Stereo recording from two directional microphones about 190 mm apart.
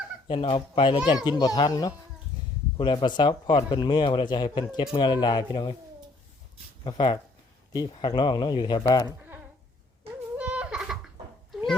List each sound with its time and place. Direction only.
0.3 s speech: 30° left (ahead or behind)
6.8 s speech: 25° left (ahead or behind)
10.3 s a sound: 5° right (ahead or behind)